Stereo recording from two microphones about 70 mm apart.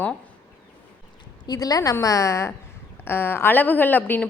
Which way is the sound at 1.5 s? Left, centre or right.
Left.